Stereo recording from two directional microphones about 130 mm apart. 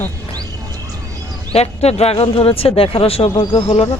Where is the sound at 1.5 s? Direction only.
55° left (ahead or behind).